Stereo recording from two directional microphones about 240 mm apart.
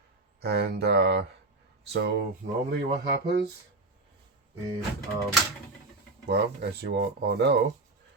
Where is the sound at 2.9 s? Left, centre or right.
Right.